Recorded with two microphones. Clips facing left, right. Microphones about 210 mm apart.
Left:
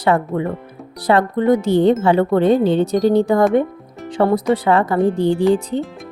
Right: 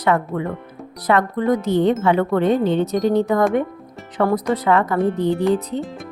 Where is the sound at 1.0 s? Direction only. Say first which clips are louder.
Left 3 dB; 30° left (ahead or behind).